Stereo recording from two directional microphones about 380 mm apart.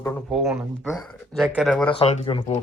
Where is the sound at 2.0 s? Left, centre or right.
Centre.